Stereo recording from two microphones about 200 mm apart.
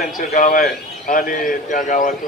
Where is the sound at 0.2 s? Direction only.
40° left (ahead or behind).